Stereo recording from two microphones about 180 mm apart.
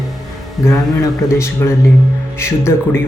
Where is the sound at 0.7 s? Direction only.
15° left (ahead or behind).